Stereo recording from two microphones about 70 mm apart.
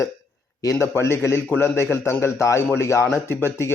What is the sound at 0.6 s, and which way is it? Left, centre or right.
Speech, left.